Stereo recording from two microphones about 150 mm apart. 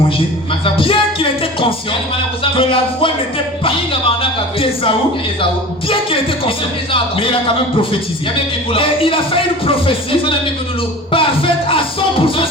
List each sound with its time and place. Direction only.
0.6 s speech: 35° left (ahead or behind)
5.9 s speech: 35° left (ahead or behind)